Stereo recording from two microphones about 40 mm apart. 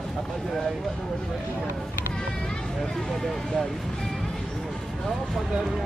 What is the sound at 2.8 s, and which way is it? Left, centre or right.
Speech, centre.